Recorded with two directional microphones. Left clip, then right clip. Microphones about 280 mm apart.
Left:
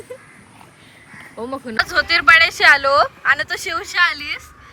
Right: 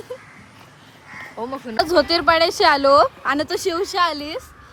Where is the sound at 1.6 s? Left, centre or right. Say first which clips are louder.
Right 1 dB; centre.